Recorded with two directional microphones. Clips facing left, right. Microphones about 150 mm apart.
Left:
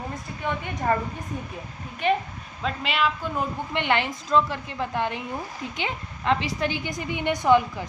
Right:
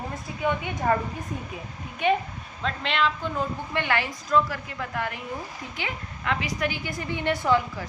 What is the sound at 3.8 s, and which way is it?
A woman's voice, 20° left (ahead or behind).